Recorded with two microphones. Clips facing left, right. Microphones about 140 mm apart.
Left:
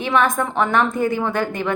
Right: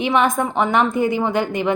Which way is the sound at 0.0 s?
15° right (ahead or behind).